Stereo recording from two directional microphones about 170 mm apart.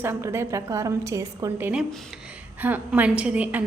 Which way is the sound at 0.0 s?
15° right (ahead or behind).